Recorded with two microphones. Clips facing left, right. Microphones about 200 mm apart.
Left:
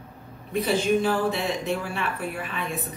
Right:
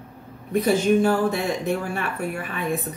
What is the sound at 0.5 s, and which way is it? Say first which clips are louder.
Speech: right 4 dB; 50° right (ahead or behind).